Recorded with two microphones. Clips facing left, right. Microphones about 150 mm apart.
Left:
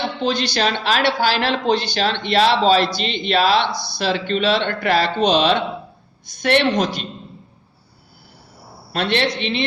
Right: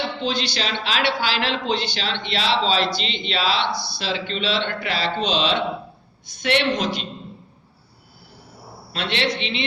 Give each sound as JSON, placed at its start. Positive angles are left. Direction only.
{"t": 0.2, "sound": "speech", "side_deg": 50}
{"t": 8.9, "sound": "speech", "side_deg": 50}